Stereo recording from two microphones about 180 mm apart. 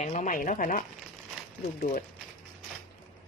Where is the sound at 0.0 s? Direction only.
40° left (ahead or behind).